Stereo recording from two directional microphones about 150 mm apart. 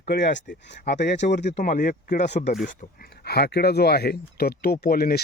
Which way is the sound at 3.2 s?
90° left.